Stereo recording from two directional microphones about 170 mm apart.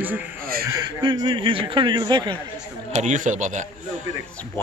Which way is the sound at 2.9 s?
45° right (ahead or behind).